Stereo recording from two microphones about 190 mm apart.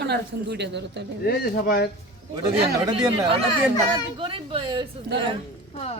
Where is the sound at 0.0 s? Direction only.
60° right (ahead or behind).